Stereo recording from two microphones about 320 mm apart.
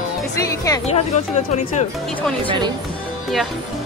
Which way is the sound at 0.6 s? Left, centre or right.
Centre.